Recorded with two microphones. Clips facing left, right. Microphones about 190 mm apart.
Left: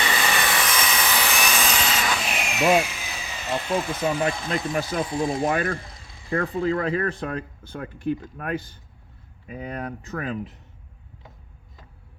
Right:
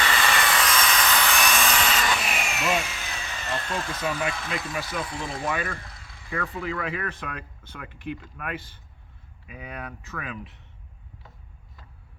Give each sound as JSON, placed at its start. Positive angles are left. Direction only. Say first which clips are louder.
{"t": 0.0, "sound": "a sound", "louder": "even", "side_deg": 15}
{"t": 3.4, "sound": "speech", "louder": "left 6 dB", "side_deg": 15}
{"t": 4.7, "sound": "speech", "louder": "left 7 dB", "side_deg": 45}
{"t": 5.0, "sound": "speech", "louder": "left 8 dB", "side_deg": 30}
{"t": 5.5, "sound": "speech", "louder": "left 5 dB", "side_deg": 45}
{"t": 6.3, "sound": "speech", "louder": "left 7 dB", "side_deg": 30}